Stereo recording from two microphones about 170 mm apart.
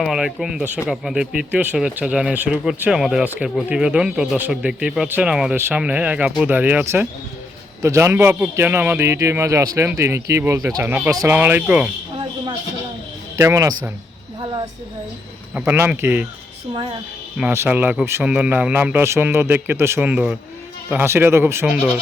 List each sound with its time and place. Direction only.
0.0 s speech: centre (ahead or behind)
13.3 s speech: 20° right (ahead or behind)
15.5 s speech: 10° right (ahead or behind)
17.3 s speech: 10° right (ahead or behind)